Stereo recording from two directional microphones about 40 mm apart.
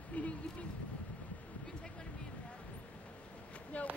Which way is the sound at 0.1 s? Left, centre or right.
Left.